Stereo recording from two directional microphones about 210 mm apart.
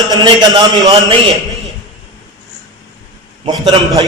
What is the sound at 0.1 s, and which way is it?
A man's voice, 20° right (ahead or behind).